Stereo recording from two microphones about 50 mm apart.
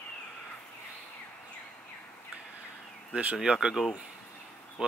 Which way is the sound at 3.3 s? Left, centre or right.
Centre.